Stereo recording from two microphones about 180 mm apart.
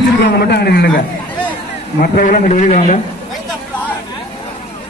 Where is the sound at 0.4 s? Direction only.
65° left (ahead or behind).